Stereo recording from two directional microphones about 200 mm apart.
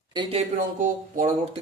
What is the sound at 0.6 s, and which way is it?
Speech, 40° right (ahead or behind).